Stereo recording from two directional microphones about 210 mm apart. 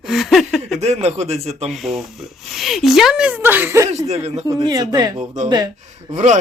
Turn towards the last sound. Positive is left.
turn(degrees=-35)  # may be behind; listen again after turning